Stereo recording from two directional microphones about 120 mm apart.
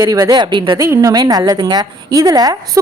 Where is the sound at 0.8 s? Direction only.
25° right (ahead or behind).